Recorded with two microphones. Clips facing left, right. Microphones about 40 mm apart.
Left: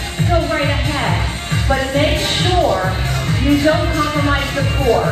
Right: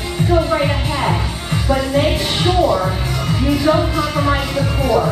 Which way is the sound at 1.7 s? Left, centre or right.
Left.